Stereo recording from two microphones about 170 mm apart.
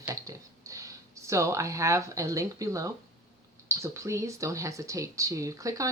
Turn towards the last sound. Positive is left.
turn(degrees=-20)  # may be behind; listen again after turning